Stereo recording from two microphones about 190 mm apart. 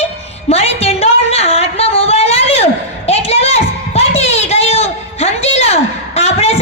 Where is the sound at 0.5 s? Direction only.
35° left (ahead or behind).